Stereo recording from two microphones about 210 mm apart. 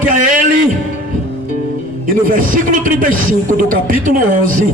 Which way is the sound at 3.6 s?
40° right (ahead or behind).